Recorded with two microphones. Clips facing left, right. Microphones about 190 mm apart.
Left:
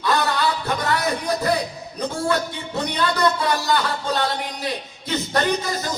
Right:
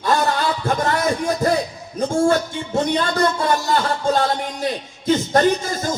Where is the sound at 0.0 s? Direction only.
45° right (ahead or behind).